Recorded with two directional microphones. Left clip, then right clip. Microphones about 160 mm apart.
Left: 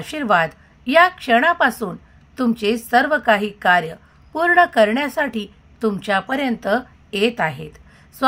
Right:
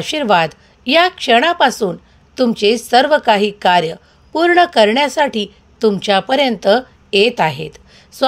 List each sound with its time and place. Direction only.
0.1 s speech: 45° right (ahead or behind)
1.7 s a woman's voice: 35° right (ahead or behind)